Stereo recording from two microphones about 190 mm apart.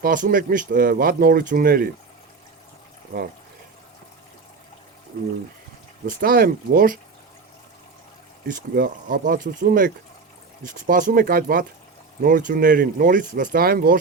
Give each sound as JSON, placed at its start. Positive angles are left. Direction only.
{"t": 0.0, "sound": "speech", "side_deg": -45}
{"t": 3.1, "sound": "speech", "side_deg": -45}
{"t": 6.1, "sound": "speech", "side_deg": -50}
{"t": 8.7, "sound": "speech", "side_deg": -45}